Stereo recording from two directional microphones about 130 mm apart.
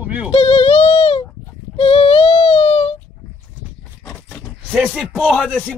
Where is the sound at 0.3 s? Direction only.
50° left (ahead or behind).